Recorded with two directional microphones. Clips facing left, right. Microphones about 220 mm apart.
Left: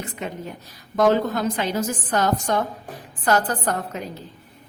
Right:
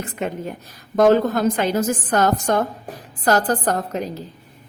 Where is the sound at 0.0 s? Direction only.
50° right (ahead or behind).